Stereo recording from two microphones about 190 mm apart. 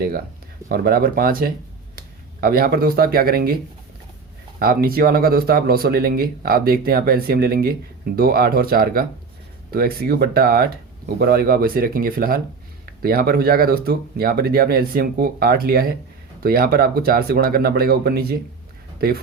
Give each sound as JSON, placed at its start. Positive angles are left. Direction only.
{"t": 0.7, "sound": "speech", "side_deg": -50}
{"t": 4.6, "sound": "speech", "side_deg": -50}